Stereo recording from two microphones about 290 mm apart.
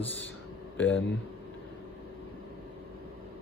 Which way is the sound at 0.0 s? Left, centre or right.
Centre.